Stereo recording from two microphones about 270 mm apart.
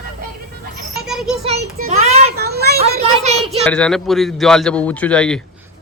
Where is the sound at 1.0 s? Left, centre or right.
Centre.